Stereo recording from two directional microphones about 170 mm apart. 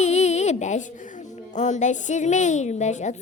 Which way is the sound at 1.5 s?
45° left (ahead or behind).